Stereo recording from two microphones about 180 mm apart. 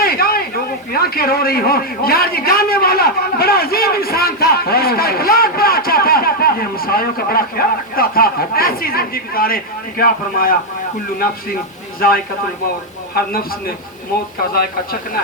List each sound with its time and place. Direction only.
0.0 s a sound: 55° left (ahead or behind)
0.9 s a man's voice: 55° left (ahead or behind)
11.9 s a man's voice: 55° left (ahead or behind)